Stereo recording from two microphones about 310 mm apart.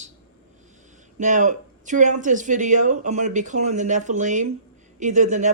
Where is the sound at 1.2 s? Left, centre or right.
Right.